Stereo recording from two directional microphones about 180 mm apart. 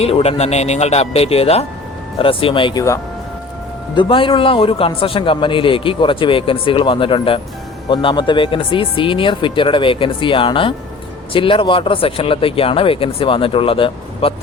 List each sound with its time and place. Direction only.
0.0 s a man's voice: 35° left (ahead or behind)